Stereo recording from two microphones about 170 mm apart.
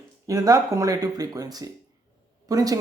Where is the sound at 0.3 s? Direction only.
20° right (ahead or behind).